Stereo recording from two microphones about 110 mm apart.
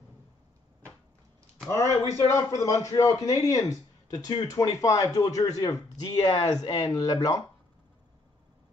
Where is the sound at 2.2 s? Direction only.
30° left (ahead or behind).